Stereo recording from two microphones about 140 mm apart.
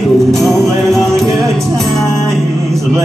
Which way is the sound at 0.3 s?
Centre (ahead or behind).